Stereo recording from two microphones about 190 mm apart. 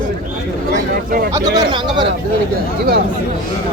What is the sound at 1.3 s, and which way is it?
Speech, 25° right (ahead or behind).